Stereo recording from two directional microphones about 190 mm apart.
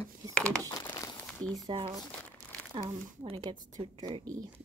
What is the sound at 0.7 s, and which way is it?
Crumpling, 20° left (ahead or behind).